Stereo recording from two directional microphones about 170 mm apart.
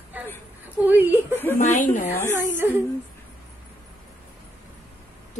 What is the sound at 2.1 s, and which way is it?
Speech, 15° left (ahead or behind).